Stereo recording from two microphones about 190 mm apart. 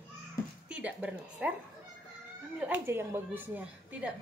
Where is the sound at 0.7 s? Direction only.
5° right (ahead or behind).